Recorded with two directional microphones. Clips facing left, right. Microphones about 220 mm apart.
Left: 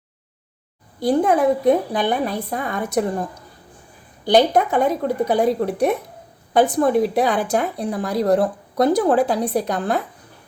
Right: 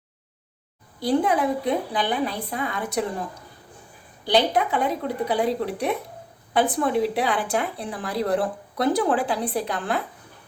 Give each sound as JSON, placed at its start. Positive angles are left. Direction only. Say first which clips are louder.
{"t": 0.9, "sound": "speech", "louder": "left 4 dB", "side_deg": 50}
{"t": 4.3, "sound": "speech", "louder": "left 5 dB", "side_deg": 45}